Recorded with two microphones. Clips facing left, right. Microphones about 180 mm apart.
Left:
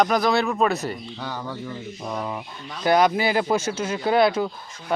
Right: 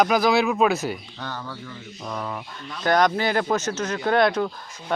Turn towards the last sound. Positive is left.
turn(degrees=5)  # may be behind; listen again after turning